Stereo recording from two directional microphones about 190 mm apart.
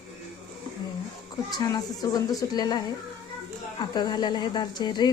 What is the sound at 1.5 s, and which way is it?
A woman's voice, 20° left (ahead or behind).